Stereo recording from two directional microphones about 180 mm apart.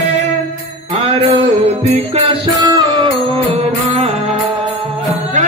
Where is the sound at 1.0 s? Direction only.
35° right (ahead or behind).